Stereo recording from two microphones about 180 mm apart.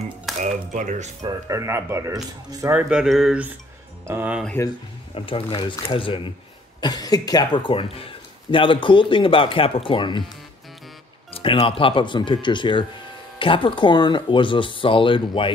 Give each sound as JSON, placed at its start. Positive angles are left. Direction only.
{"t": 0.4, "sound": "speech", "side_deg": -45}
{"t": 1.2, "sound": "speech", "side_deg": -15}
{"t": 2.9, "sound": "speech", "side_deg": -5}
{"t": 5.1, "sound": "speech", "side_deg": 30}
{"t": 11.3, "sound": "speech", "side_deg": 30}